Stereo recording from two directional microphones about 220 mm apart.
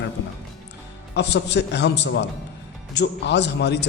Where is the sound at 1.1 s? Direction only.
50° left (ahead or behind).